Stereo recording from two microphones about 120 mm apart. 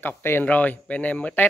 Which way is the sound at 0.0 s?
15° left (ahead or behind).